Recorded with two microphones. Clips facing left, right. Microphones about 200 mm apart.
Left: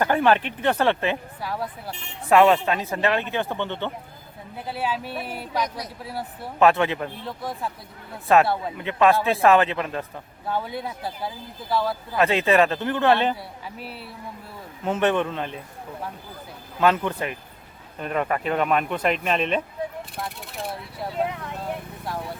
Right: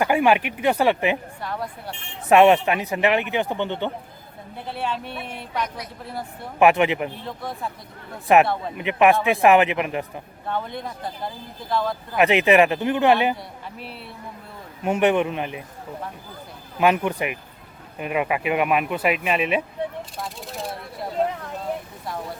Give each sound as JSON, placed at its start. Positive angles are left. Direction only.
{"t": 0.0, "sound": "speech", "side_deg": -10}
{"t": 1.4, "sound": "speech", "side_deg": 5}
{"t": 2.3, "sound": "speech", "side_deg": -20}
{"t": 4.5, "sound": "speech", "side_deg": 5}
{"t": 5.6, "sound": "speech", "side_deg": 35}
{"t": 6.6, "sound": "speech", "side_deg": -15}
{"t": 7.3, "sound": "speech", "side_deg": 0}
{"t": 8.3, "sound": "speech", "side_deg": -15}
{"t": 10.4, "sound": "speech", "side_deg": 5}
{"t": 12.1, "sound": "speech", "side_deg": -15}
{"t": 13.3, "sound": "speech", "side_deg": 0}
{"t": 14.8, "sound": "speech", "side_deg": -15}
{"t": 16.8, "sound": "speech", "side_deg": -15}